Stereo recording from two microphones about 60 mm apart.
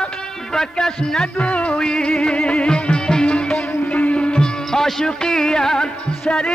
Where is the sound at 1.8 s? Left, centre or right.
Centre.